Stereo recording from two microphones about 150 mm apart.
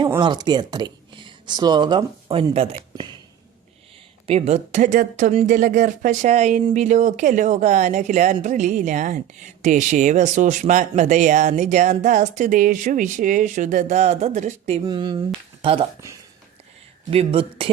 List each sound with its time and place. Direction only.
0.2 s speech: 30° right (ahead or behind)
2.9 s a sound: 30° right (ahead or behind)
4.3 s speech: 45° right (ahead or behind)
14.8 s speech: 30° right (ahead or behind)
17.1 s speech: 40° right (ahead or behind)